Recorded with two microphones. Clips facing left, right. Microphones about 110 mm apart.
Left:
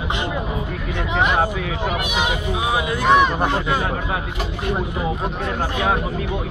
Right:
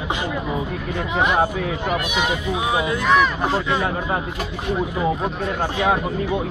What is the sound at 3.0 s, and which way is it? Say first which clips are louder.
Speech: left 3 dB; 25° left (ahead or behind).